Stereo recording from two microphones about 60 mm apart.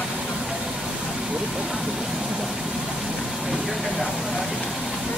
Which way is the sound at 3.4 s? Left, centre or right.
Centre.